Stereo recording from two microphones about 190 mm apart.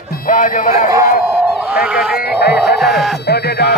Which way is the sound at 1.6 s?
5° right (ahead or behind).